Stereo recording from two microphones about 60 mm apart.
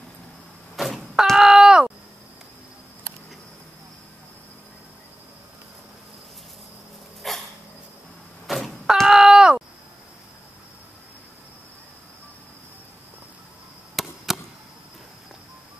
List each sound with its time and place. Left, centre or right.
0.7 s door: centre
7.2 s dog: centre
8.5 s door: centre
13.9 s chop: centre